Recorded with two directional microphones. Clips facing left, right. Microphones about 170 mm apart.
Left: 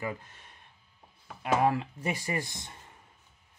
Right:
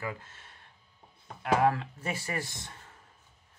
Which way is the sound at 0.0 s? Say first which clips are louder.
Left 2 dB; 15° left (ahead or behind).